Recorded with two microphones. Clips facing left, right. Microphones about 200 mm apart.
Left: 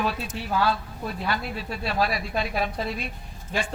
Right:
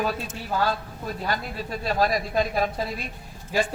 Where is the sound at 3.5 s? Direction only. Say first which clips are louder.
Right 4 dB; 5° right (ahead or behind).